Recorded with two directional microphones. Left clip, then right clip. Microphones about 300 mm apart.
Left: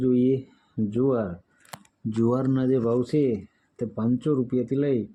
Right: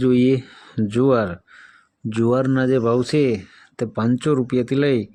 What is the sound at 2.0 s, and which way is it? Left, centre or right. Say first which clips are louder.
Speech: right 6 dB; centre.